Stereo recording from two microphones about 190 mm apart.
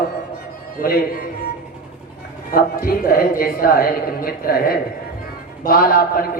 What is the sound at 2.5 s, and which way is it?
A man's voice, 50° left (ahead or behind).